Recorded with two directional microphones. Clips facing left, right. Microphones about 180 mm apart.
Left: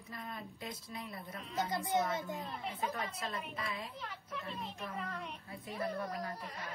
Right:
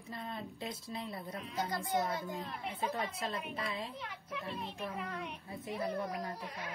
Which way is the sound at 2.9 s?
25° right (ahead or behind).